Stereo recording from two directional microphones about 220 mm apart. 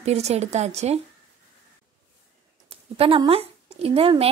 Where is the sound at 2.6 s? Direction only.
25° right (ahead or behind).